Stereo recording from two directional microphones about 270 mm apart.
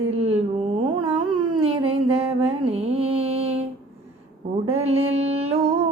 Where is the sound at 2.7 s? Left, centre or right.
Right.